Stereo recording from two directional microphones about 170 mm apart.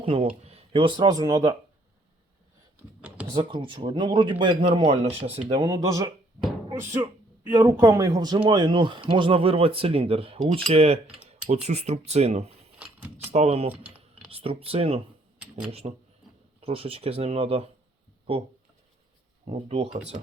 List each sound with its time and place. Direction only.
0.0 s speech: 35° right (ahead or behind)
3.3 s speech: 30° right (ahead or behind)
13.7 s typing: 10° right (ahead or behind)
14.3 s speech: 35° right (ahead or behind)
15.4 s a sound: 5° right (ahead or behind)
16.6 s speech: 35° right (ahead or behind)
19.5 s speech: 35° right (ahead or behind)